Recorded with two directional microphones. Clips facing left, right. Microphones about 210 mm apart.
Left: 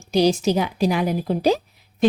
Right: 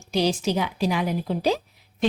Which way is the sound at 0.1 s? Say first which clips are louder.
Left 5 dB; 40° left (ahead or behind).